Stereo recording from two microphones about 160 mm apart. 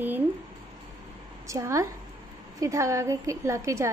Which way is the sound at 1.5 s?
20° right (ahead or behind).